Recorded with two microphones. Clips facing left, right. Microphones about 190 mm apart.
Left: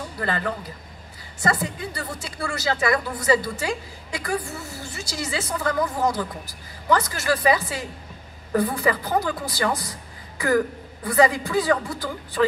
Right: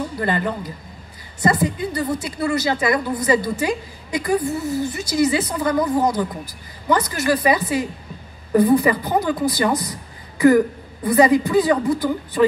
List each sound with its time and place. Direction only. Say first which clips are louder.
0.2 s a woman's voice: right 3 dB; 20° right (ahead or behind)